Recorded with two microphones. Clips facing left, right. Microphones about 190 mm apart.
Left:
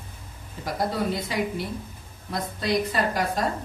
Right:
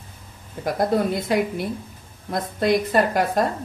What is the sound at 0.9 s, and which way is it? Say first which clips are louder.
A woman's voice: right 6 dB; 50° right (ahead or behind).